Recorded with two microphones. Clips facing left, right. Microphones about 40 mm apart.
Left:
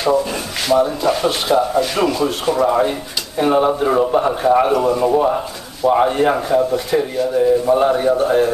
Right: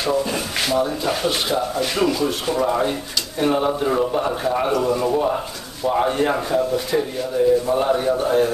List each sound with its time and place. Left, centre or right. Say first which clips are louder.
0.0 s speech: left 4 dB; centre